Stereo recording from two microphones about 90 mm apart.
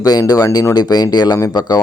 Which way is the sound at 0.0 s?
45° left (ahead or behind).